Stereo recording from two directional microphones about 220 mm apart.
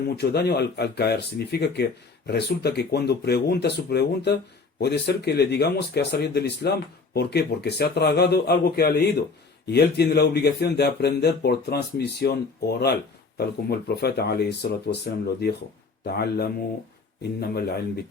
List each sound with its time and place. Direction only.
0.2 s speech: 50° left (ahead or behind)